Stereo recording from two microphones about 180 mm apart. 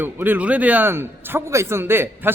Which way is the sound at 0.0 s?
10° right (ahead or behind).